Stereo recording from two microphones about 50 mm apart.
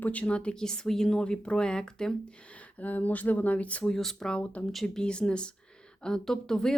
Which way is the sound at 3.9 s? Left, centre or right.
Centre.